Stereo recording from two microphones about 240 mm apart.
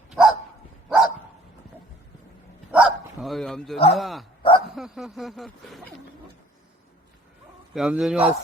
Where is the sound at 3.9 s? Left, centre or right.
Centre.